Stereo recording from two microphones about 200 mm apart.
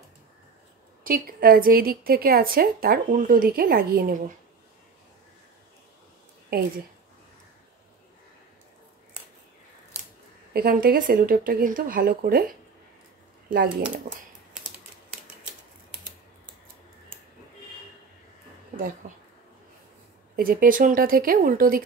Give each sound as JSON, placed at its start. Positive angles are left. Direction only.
{"t": 1.0, "sound": "a woman's voice", "side_deg": -45}
{"t": 6.5, "sound": "a woman's voice", "side_deg": -50}
{"t": 10.5, "sound": "a woman's voice", "side_deg": -50}
{"t": 13.5, "sound": "a woman's voice", "side_deg": -45}
{"t": 18.8, "sound": "a woman's voice", "side_deg": -45}
{"t": 20.3, "sound": "a woman's voice", "side_deg": -45}